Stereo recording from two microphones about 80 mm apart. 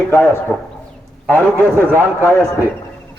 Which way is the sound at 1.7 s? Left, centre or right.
Right.